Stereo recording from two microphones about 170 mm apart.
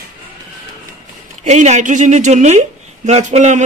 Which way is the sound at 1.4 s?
45° right (ahead or behind).